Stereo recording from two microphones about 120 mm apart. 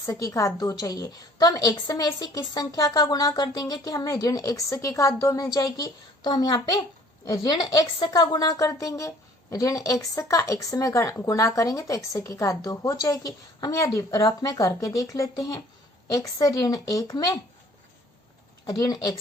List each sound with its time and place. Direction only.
0.0 s a woman's voice: 25° left (ahead or behind)
18.6 s a woman's voice: 30° left (ahead or behind)